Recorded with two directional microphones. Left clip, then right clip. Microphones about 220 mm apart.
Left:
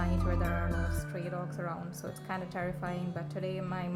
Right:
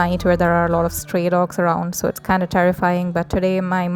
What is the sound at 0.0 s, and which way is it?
Speech, 45° right (ahead or behind).